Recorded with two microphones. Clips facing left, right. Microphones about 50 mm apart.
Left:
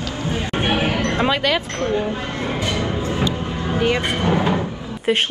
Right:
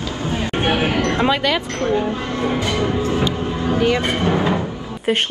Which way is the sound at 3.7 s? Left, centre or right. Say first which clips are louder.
Right 1 dB; centre.